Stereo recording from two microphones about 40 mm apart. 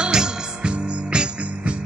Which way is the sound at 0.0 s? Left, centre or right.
Right.